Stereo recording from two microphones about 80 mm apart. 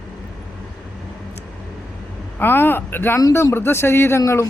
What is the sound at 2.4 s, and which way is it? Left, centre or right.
Speech, left.